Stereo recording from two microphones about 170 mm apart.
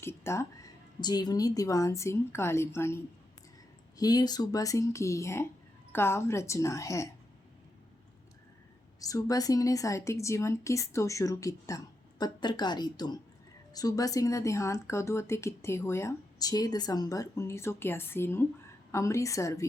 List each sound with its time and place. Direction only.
0.0 s a woman's voice: 15° left (ahead or behind)
9.0 s a woman's voice: 20° left (ahead or behind)